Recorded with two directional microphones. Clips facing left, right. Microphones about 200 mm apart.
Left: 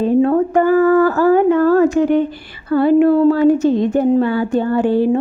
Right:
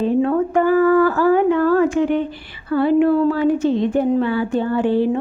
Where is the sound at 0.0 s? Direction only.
40° left (ahead or behind).